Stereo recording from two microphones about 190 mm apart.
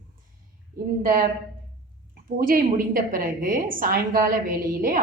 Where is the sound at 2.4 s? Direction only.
50° right (ahead or behind).